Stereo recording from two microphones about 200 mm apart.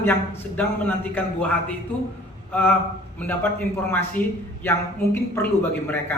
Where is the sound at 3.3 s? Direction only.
10° left (ahead or behind).